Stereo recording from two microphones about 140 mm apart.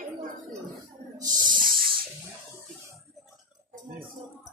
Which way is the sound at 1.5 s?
85° right.